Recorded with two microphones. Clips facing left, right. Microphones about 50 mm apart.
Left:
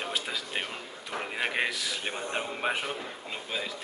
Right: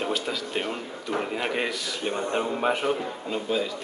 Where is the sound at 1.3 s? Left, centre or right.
Centre.